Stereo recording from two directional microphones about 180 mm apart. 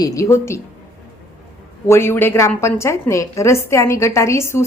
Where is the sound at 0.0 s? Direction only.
20° left (ahead or behind).